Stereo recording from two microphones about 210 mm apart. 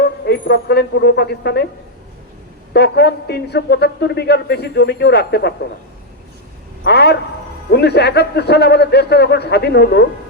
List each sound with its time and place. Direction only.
0.0 s speech: 50° left (ahead or behind)
2.7 s a man's voice: 50° left (ahead or behind)
6.8 s a man's voice: 50° left (ahead or behind)